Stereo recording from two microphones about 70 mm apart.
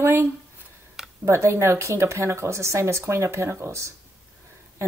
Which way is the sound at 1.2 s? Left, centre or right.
Right.